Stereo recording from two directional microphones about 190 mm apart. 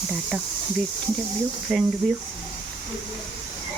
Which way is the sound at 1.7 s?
Centre (ahead or behind).